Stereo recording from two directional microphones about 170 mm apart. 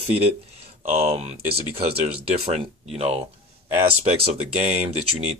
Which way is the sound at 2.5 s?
35° right (ahead or behind).